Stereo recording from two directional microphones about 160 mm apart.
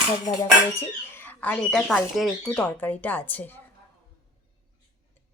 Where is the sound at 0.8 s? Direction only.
15° left (ahead or behind).